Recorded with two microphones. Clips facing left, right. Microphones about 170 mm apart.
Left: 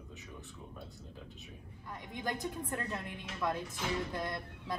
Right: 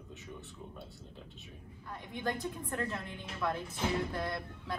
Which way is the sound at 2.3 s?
15° left (ahead or behind).